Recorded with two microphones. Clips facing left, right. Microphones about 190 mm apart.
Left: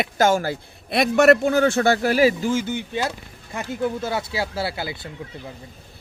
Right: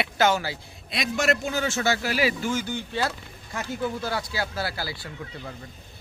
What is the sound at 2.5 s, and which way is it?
Speech, 25° left (ahead or behind).